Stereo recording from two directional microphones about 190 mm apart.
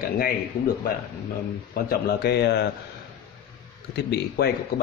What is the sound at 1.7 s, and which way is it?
Speech, 55° left (ahead or behind).